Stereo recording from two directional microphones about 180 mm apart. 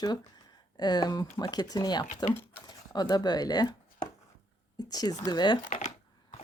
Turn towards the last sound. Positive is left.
turn(degrees=25)  # may be behind; listen again after turning